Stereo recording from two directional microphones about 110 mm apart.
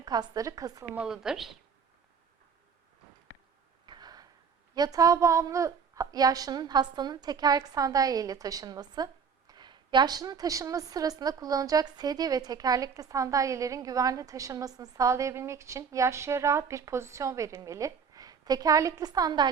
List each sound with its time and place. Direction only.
0.0 s a woman's voice: 35° right (ahead or behind)
0.9 s a woman's voice: 5° right (ahead or behind)
3.8 s a sound: 40° right (ahead or behind)
4.7 s a woman's voice: 35° right (ahead or behind)